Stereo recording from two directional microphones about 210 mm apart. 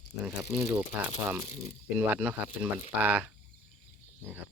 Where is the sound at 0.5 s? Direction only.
10° right (ahead or behind).